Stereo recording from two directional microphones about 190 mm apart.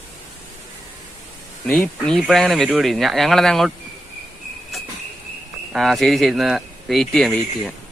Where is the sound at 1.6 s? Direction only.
5° left (ahead or behind).